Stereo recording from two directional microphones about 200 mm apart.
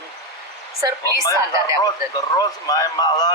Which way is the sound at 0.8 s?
15° right (ahead or behind).